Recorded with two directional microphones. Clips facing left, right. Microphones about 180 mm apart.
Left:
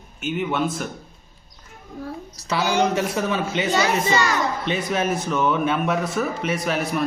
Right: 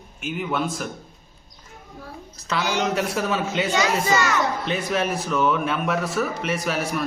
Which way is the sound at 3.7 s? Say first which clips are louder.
Left 1 dB; 35° left (ahead or behind).